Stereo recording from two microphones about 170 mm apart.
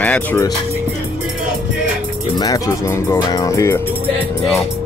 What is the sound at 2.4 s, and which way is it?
Speech, 20° left (ahead or behind).